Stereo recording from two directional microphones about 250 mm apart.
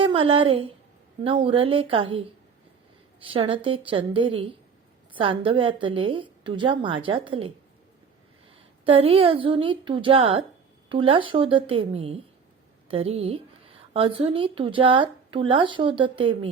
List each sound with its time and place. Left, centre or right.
0.0 s speech: right
8.8 s speech: right